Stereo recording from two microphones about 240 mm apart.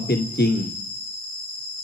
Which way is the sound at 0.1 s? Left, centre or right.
Left.